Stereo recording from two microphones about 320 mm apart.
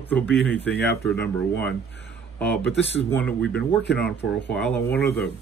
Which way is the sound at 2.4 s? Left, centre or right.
Centre.